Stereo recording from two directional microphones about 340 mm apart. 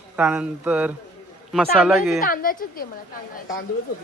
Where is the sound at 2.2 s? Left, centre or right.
Left.